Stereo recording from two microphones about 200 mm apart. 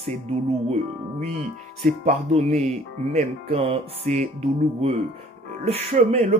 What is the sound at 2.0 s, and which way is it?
Speech, 35° right (ahead or behind).